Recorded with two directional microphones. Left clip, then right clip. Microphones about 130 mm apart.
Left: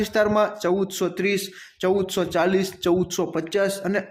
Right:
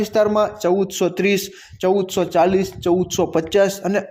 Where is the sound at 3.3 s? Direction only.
25° right (ahead or behind).